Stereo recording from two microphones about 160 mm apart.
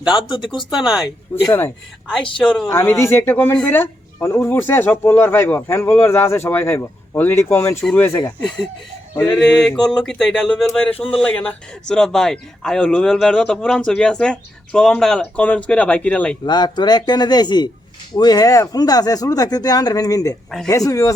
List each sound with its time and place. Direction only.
0.1 s speech: 30° left (ahead or behind)
0.7 s a man's voice: centre (ahead or behind)
1.5 s speech: 15° left (ahead or behind)
2.4 s a man's voice: 5° left (ahead or behind)
2.6 s speech: 15° left (ahead or behind)
9.3 s a man's voice: 5° left (ahead or behind)
16.5 s speech: 25° left (ahead or behind)